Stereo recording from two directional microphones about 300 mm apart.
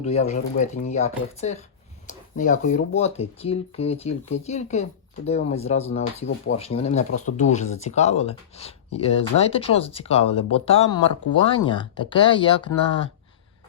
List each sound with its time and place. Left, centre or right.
0.0 s speech: left